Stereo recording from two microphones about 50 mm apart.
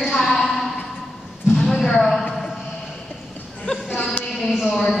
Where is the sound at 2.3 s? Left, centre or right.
Centre.